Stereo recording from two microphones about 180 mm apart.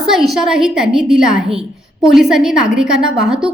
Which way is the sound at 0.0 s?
Centre (ahead or behind).